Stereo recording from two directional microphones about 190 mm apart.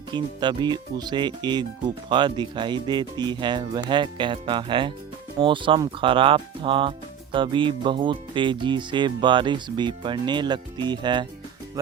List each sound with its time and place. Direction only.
0.1 s speech: 25° right (ahead or behind)